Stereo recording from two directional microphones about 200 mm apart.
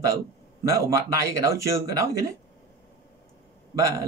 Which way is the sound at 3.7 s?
15° right (ahead or behind).